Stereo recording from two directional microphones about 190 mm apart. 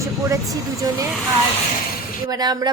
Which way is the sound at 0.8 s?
20° right (ahead or behind).